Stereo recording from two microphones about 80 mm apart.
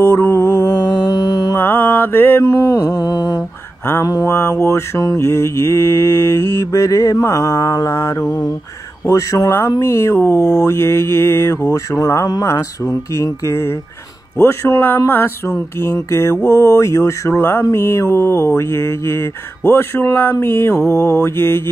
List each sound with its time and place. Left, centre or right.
0.0 s music: left
1.5 s mantra: left
9.1 s speech: left
9.8 s mantra: left